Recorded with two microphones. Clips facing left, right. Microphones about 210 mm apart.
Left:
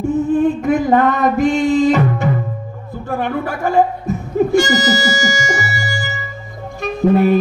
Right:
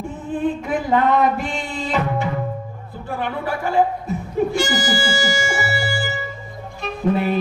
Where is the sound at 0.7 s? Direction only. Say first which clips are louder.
Left 5 dB; 45° left (ahead or behind).